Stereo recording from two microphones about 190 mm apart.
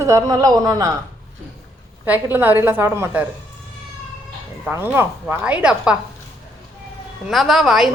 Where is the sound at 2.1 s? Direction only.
10° right (ahead or behind).